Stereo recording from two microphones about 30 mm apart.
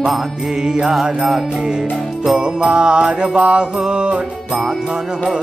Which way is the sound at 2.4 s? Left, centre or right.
Right.